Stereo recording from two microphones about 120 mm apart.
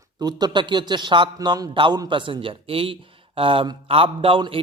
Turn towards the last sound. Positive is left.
turn(degrees=-50)  # may be behind; listen again after turning